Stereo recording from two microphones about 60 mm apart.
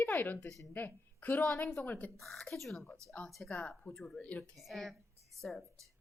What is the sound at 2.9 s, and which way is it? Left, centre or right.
Speech, centre.